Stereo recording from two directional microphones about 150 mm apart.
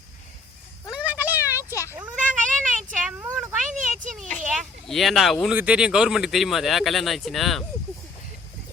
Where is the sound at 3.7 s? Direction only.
55° right (ahead or behind).